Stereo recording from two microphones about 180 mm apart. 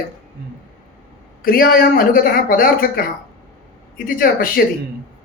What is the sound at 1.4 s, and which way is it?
Speech, 55° left (ahead or behind).